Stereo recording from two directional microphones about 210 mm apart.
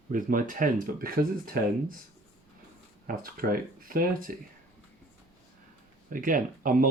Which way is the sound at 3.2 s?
45° right (ahead or behind).